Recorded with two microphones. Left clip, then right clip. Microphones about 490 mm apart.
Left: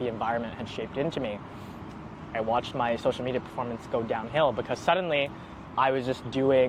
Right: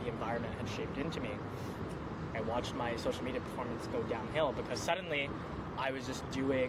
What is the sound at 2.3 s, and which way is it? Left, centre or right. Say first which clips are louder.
Speech: left 10 dB; left.